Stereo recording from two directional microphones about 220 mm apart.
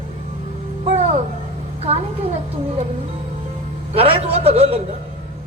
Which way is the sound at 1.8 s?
30° right (ahead or behind).